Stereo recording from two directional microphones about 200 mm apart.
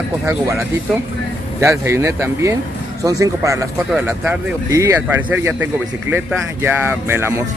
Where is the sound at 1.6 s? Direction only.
15° right (ahead or behind).